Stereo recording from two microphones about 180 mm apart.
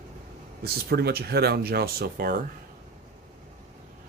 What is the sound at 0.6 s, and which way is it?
Speech, 60° right (ahead or behind).